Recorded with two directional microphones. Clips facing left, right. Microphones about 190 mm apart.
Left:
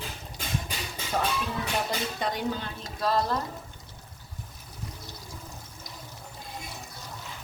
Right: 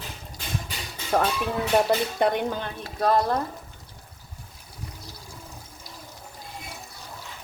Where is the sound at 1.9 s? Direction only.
60° right (ahead or behind).